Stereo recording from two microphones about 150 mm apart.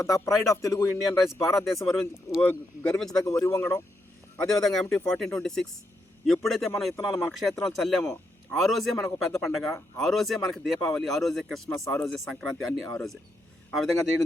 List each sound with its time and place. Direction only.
0.0 s a man's voice: 20° left (ahead or behind)
1.8 s a man's voice: centre (ahead or behind)
3.2 s speech: 20° left (ahead or behind)
4.4 s a man's voice: 5° left (ahead or behind)
8.0 s a sound: 15° left (ahead or behind)
8.6 s a man's voice: centre (ahead or behind)